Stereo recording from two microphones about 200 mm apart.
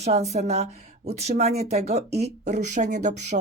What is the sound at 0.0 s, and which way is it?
A woman's voice, 30° right (ahead or behind).